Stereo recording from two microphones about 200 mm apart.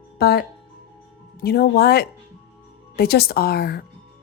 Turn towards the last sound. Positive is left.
turn(degrees=50)  # may be behind; listen again after turning